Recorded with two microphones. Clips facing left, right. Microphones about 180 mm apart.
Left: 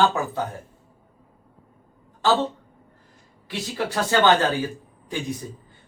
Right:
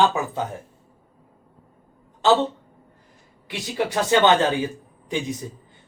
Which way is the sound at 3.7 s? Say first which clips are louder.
Right 3 dB; 20° right (ahead or behind).